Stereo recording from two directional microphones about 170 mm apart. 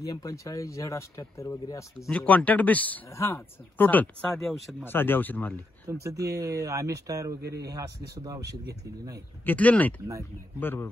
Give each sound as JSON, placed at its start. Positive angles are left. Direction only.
{"t": 0.0, "sound": "speech", "side_deg": 20}
{"t": 4.8, "sound": "speech", "side_deg": 10}
{"t": 5.9, "sound": "speech", "side_deg": -15}
{"t": 9.5, "sound": "speech", "side_deg": 10}